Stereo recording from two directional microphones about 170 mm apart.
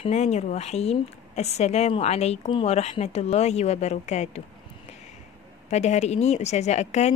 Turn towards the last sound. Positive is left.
turn(degrees=40)  # may be behind; listen again after turning